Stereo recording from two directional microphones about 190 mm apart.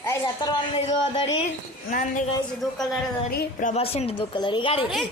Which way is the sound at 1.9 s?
40° left (ahead or behind).